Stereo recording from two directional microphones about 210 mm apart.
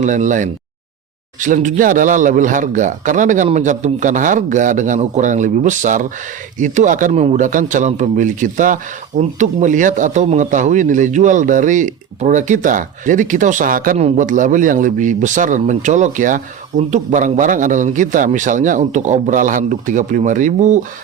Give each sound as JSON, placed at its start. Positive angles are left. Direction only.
{"t": 0.0, "sound": "a man's voice", "side_deg": -35}